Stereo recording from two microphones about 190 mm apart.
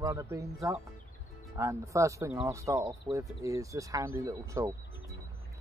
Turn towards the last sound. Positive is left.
turn(degrees=-15)  # may be behind; listen again after turning